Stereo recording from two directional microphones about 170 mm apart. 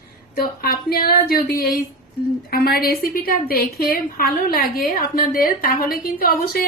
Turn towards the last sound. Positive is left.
turn(degrees=55)  # may be behind; listen again after turning